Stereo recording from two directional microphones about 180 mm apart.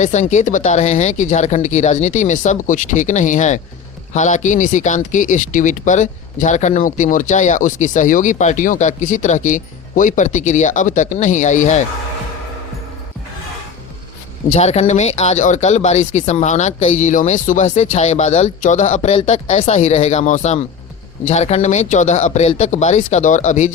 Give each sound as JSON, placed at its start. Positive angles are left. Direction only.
{"t": 0.0, "sound": "speech", "side_deg": 40}
{"t": 14.5, "sound": "speech", "side_deg": 35}